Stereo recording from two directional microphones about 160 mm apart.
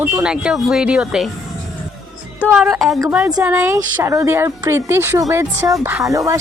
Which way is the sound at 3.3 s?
15° right (ahead or behind).